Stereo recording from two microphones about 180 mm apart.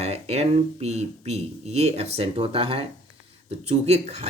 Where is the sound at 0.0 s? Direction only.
35° right (ahead or behind).